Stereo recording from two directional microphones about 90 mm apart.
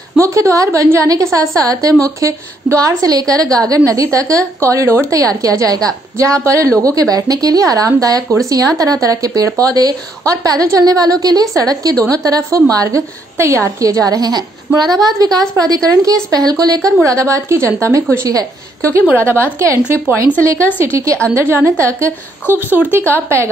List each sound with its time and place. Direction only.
0.2 s a woman's voice: 35° right (ahead or behind)
3.1 s a woman's voice: 45° right (ahead or behind)
5.2 s a woman's voice: 40° right (ahead or behind)
14.0 s a woman's voice: 45° right (ahead or behind); by 19.8 s 30° right (ahead or behind)
19.8 s speech: 15° right (ahead or behind)
20.8 s a woman's voice: 35° right (ahead or behind)
22.7 s speech: 20° right (ahead or behind)